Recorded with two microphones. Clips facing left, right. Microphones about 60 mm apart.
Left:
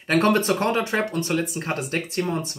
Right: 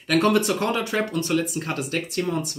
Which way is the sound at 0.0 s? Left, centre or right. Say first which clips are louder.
Even; left.